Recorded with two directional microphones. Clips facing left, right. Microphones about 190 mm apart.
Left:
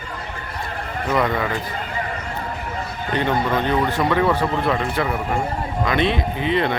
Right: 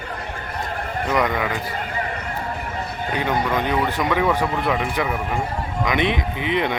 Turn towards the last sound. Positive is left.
turn(degrees=-15)  # may be behind; listen again after turning